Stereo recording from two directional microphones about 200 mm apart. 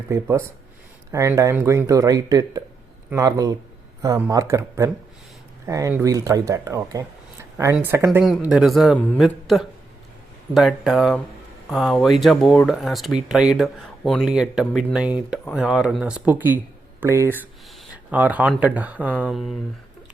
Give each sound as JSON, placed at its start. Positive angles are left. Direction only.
{"t": 0.1, "sound": "speech", "side_deg": -15}